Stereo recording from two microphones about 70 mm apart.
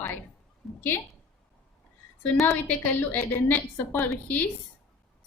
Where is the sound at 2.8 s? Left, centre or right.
Left.